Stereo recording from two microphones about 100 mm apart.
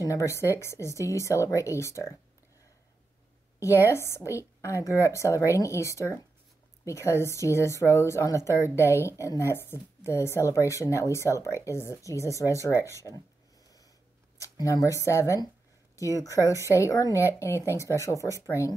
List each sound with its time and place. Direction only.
0.0 s a woman's voice: 30° left (ahead or behind)
3.5 s a woman's voice: 30° left (ahead or behind)
14.4 s a woman's voice: 35° left (ahead or behind)